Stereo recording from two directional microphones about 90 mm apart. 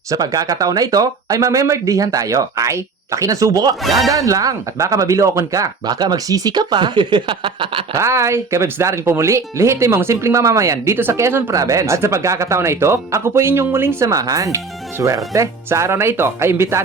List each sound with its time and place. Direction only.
0.1 s speech: 40° right (ahead or behind)
3.8 s speech: centre (ahead or behind)
4.1 s speech: 40° right (ahead or behind); by 7.9 s 75° right (ahead or behind)
7.9 s speech: 35° right (ahead or behind)
11.5 s speech: 40° right (ahead or behind)
14.0 s speech: 40° right (ahead or behind)